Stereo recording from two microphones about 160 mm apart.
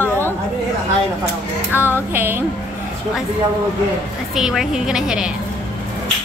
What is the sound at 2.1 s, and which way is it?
Speech, 10° right (ahead or behind).